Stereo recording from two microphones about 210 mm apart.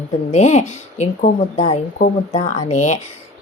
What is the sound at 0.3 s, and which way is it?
A woman's voice, 30° left (ahead or behind).